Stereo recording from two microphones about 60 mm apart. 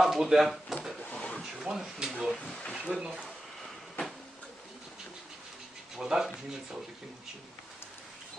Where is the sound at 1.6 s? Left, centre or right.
Centre.